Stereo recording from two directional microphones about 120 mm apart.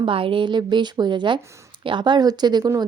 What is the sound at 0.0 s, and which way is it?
Speech, 45° right (ahead or behind).